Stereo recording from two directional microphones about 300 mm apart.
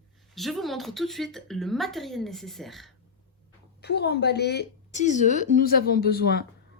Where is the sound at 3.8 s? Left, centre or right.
Left.